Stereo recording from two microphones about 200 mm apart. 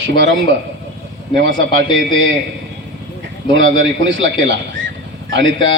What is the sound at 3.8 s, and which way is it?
A man's voice, 65° right (ahead or behind).